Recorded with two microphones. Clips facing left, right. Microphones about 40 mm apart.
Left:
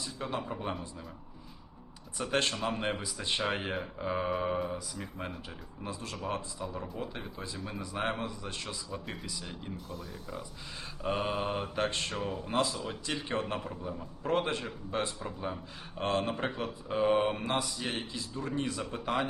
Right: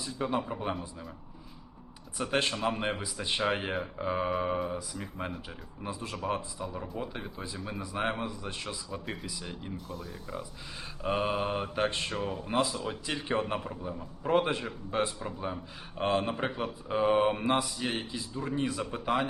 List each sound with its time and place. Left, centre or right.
0.0 s a man's voice: centre
2.1 s a man's voice: centre